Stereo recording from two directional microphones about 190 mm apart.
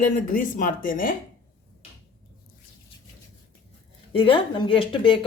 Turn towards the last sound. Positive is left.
turn(degrees=25)  # may be behind; listen again after turning